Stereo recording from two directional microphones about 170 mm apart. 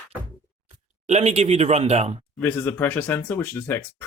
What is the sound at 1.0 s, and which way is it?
Speech, 40° right (ahead or behind).